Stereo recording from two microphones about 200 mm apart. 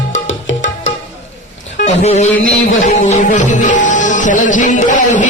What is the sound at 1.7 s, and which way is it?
Speech, 35° left (ahead or behind).